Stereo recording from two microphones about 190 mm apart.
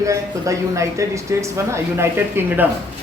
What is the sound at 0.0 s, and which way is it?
A woman's voice, 15° right (ahead or behind).